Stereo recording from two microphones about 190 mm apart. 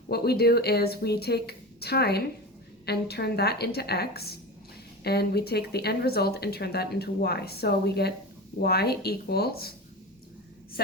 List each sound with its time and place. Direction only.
0.1 s speech: 55° left (ahead or behind)